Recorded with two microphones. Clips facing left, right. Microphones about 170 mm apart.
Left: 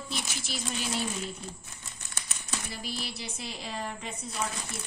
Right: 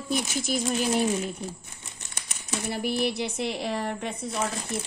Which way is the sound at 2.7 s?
60° right (ahead or behind).